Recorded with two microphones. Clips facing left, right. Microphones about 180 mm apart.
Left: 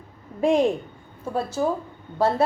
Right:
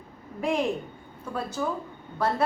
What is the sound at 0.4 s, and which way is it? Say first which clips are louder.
Speech: left 7 dB; 30° left (ahead or behind).